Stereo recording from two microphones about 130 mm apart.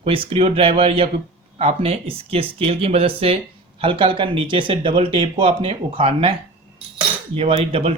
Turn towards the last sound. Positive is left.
turn(degrees=-50)  # may be behind; listen again after turning